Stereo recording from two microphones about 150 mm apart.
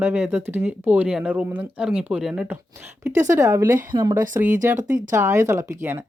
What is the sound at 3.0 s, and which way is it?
Speech, 15° right (ahead or behind).